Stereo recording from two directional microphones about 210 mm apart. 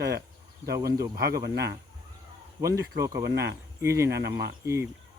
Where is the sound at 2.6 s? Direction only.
15° right (ahead or behind).